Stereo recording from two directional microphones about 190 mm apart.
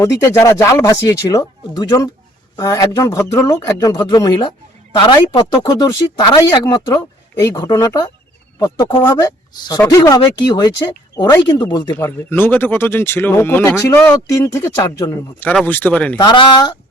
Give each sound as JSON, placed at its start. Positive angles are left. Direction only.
{"t": 0.0, "sound": "a woman's voice", "side_deg": 15}
{"t": 11.9, "sound": "speech", "side_deg": 10}
{"t": 16.1, "sound": "speech", "side_deg": 25}